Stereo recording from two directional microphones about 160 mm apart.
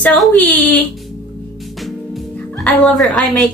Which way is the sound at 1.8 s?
Centre (ahead or behind).